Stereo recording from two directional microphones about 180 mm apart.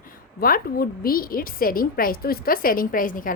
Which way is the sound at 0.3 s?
55° left (ahead or behind).